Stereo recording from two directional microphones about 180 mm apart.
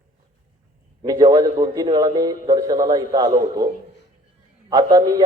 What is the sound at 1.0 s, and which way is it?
A man's voice, 25° right (ahead or behind).